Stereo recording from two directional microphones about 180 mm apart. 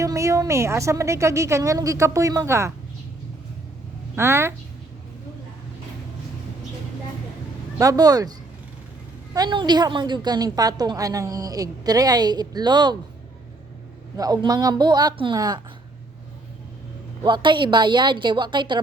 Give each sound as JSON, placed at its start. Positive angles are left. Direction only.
{"t": 0.0, "sound": "a woman's voice", "side_deg": -15}
{"t": 4.1, "sound": "a woman's voice", "side_deg": -15}
{"t": 7.8, "sound": "a woman's voice", "side_deg": -20}
{"t": 9.3, "sound": "a woman's voice", "side_deg": -25}
{"t": 14.2, "sound": "a woman's voice", "side_deg": -20}
{"t": 17.2, "sound": "a woman's voice", "side_deg": -25}